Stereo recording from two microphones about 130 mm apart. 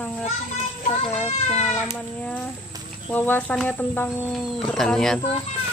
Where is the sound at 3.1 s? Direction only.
15° left (ahead or behind).